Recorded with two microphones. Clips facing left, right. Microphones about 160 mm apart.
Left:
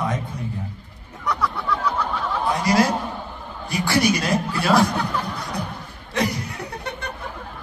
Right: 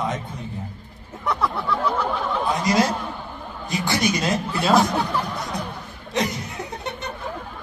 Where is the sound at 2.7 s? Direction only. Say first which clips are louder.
Left 3 dB; 20° right (ahead or behind).